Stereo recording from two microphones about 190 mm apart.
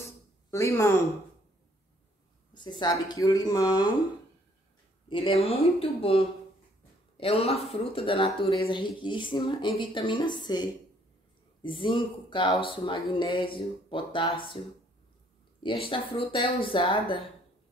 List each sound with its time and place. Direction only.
0.0 s a sound: 15° left (ahead or behind)
2.5 s speech: 25° left (ahead or behind)
5.1 s speech: 30° left (ahead or behind)
15.6 s speech: 30° left (ahead or behind)